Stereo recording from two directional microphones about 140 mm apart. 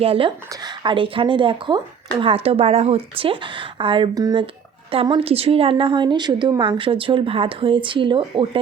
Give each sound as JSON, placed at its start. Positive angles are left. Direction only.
{"t": 0.0, "sound": "a woman's voice", "side_deg": -40}